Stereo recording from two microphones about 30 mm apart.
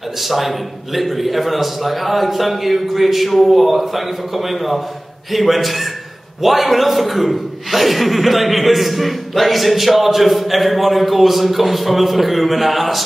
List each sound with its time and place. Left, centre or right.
0.2 s a man's voice: centre